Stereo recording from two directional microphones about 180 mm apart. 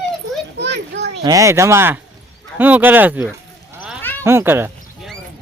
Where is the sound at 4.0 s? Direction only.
10° left (ahead or behind).